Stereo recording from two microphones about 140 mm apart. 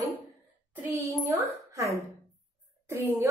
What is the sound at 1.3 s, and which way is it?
A woman's voice, 20° right (ahead or behind).